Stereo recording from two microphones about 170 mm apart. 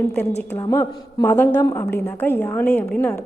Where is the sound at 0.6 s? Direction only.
15° left (ahead or behind).